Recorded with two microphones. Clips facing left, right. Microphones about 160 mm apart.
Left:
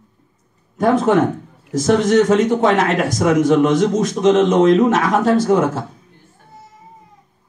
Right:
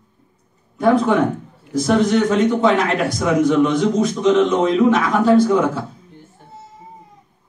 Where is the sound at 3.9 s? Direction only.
90° left.